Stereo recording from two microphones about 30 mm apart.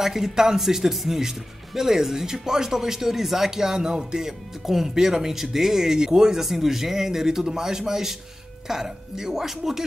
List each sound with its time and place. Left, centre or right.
0.0 s speech: centre
4.6 s speech: centre
6.4 s speech: centre